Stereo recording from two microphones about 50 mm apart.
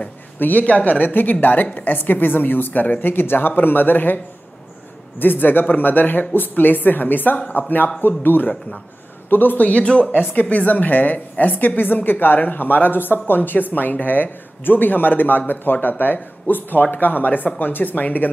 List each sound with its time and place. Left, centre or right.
0.4 s a woman's voice: left
5.2 s a woman's voice: left
9.7 s a woman's voice: left